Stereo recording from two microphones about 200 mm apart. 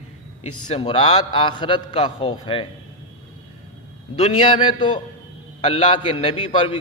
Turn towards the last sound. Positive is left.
turn(degrees=25)  # may be behind; listen again after turning